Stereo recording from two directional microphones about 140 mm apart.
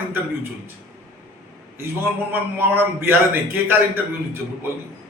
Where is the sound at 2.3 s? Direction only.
15° right (ahead or behind).